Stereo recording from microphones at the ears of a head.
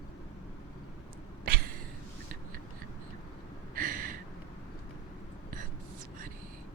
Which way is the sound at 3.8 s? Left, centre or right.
Right.